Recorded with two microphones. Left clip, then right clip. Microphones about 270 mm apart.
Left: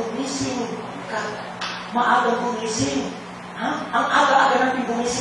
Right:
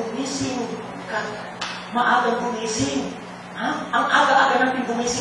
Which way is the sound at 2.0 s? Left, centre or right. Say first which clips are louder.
Left 1 dB; centre.